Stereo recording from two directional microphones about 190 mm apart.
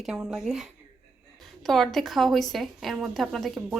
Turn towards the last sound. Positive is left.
turn(degrees=-5)  # may be behind; listen again after turning